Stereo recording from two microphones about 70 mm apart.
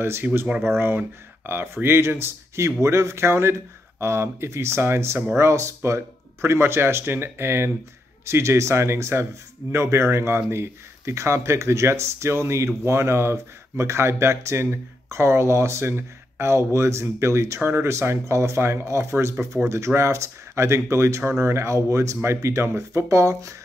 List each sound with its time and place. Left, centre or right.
0.0 s speech: right